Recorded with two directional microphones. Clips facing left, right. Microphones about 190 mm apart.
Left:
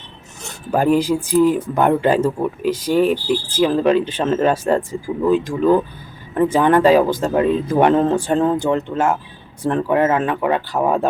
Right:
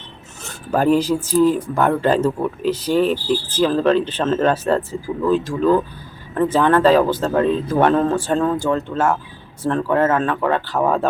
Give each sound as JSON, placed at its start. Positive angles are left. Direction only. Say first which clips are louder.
{"t": 0.4, "sound": "speech", "louder": "even", "side_deg": 15}